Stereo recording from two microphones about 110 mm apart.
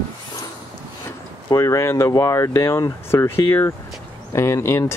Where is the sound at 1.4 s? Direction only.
30° left (ahead or behind).